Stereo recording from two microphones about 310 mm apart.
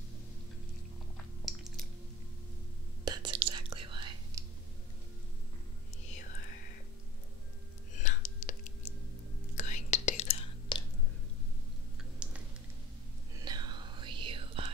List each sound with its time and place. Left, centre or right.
1.1 s a sound: centre
3.1 s whispering: centre
7.9 s whispering: left
9.6 s whispering: left
12.2 s a sound: centre
13.4 s whispering: centre